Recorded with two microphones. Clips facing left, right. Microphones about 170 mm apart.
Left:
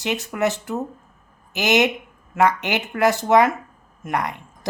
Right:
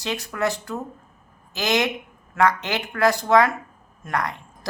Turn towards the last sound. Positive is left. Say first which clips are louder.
# left 2 dB
turn(degrees=20)  # may be behind; listen again after turning